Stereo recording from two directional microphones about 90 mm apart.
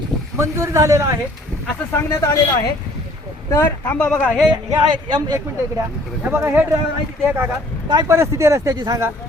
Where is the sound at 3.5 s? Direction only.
25° left (ahead or behind).